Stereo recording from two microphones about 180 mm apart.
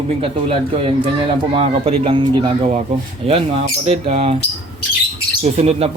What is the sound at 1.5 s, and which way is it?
Speech, 30° right (ahead or behind).